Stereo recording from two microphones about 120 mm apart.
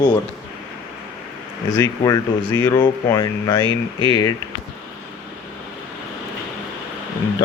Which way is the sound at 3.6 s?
40° right (ahead or behind).